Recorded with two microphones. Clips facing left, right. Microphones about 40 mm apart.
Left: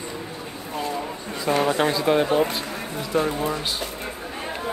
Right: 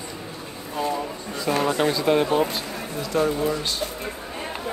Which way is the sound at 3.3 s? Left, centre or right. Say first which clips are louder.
Right 2 dB; left.